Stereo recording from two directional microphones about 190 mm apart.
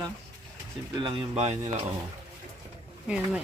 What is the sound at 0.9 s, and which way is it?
Speech, 25° right (ahead or behind).